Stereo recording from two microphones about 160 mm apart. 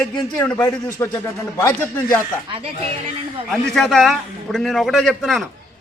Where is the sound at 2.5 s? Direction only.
35° right (ahead or behind).